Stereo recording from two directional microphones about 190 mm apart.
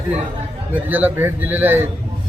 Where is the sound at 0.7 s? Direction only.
10° right (ahead or behind).